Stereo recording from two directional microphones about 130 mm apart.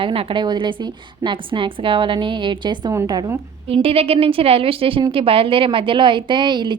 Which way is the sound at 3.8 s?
50° right (ahead or behind).